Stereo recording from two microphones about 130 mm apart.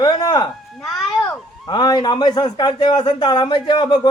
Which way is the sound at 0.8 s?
5° left (ahead or behind).